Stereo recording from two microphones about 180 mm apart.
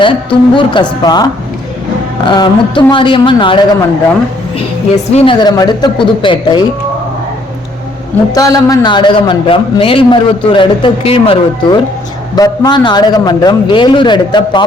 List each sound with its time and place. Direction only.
0.0 s a man's voice: 25° left (ahead or behind)
5.1 s a man's voice: 30° left (ahead or behind)
8.3 s a man's voice: 20° left (ahead or behind)